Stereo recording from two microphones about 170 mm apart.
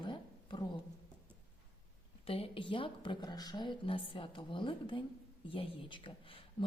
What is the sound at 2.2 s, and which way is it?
Speech, 35° left (ahead or behind).